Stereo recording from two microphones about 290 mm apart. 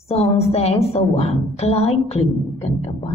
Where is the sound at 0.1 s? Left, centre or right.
Left.